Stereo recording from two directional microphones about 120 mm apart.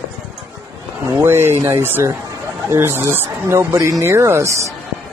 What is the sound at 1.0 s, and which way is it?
Speech, 25° right (ahead or behind).